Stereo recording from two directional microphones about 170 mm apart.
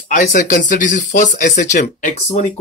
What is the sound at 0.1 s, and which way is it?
Speech, 45° left (ahead or behind).